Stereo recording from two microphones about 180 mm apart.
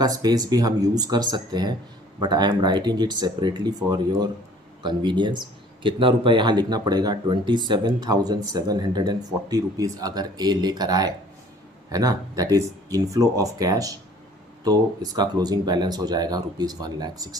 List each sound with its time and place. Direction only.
0.0 s speech: 20° right (ahead or behind)